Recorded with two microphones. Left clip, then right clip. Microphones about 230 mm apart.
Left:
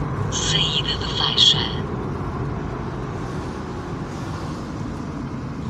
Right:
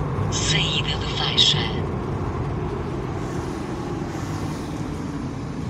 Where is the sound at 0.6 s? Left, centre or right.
Right.